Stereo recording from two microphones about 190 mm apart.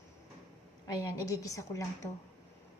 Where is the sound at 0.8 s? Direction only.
20° left (ahead or behind).